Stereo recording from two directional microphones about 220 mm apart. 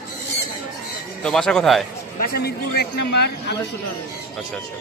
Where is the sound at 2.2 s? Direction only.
45° left (ahead or behind).